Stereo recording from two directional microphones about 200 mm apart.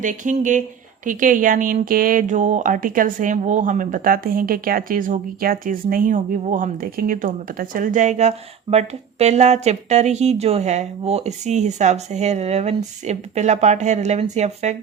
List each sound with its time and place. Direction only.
0.0 s speech: 40° right (ahead or behind)